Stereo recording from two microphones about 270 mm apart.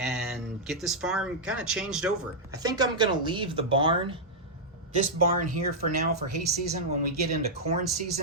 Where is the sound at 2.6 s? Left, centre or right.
Centre.